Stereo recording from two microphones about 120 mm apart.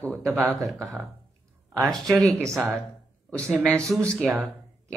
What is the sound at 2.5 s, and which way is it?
Speech, 25° right (ahead or behind).